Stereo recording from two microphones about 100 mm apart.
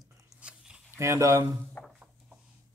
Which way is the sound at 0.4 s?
10° right (ahead or behind).